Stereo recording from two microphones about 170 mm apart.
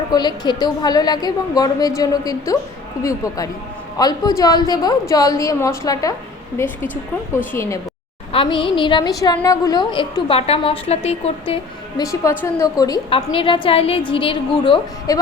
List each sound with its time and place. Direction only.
0.1 s a woman's voice: 25° left (ahead or behind)
3.0 s a woman's voice: 20° left (ahead or behind)
8.3 s a woman's voice: 30° left (ahead or behind)
12.0 s a woman's voice: 15° left (ahead or behind)
13.1 s a woman's voice: 30° left (ahead or behind)